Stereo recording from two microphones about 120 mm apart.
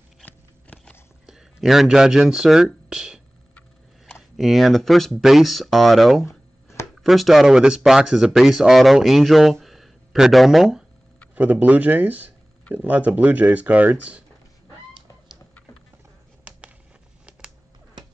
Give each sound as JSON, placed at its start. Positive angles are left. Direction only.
{"t": 0.2, "sound": "biting", "side_deg": 10}
{"t": 1.2, "sound": "speech", "side_deg": -5}
{"t": 6.2, "sound": "a sound", "side_deg": 25}
{"t": 7.0, "sound": "speech", "side_deg": 0}